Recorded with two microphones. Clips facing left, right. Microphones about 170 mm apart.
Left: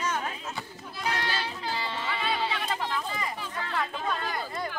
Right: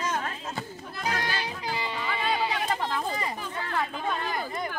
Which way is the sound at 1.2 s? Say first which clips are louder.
Even; 15° right (ahead or behind).